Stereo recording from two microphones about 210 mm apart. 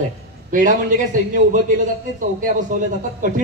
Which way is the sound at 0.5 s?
40° right (ahead or behind).